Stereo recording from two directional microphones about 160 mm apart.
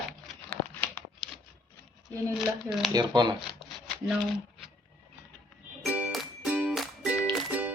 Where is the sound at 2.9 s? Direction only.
25° right (ahead or behind).